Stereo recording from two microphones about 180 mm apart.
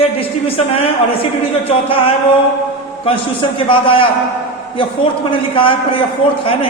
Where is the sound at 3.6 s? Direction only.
30° left (ahead or behind).